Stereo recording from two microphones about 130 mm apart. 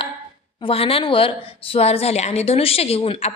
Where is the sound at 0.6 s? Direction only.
45° left (ahead or behind).